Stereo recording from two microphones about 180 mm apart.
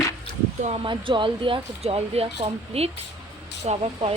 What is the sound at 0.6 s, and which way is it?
Speech, 30° right (ahead or behind).